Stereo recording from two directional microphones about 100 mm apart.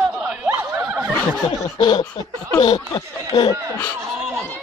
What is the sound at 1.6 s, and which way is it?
Laughter, 45° left (ahead or behind).